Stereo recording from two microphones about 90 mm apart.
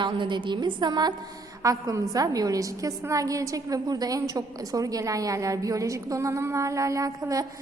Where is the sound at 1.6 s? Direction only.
40° right (ahead or behind).